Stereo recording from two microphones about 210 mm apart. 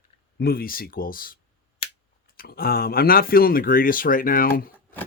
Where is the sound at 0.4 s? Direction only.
45° left (ahead or behind).